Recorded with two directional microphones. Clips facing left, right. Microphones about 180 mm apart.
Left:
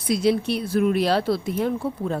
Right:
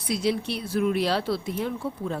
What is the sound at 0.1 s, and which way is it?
A woman's voice, 50° left (ahead or behind).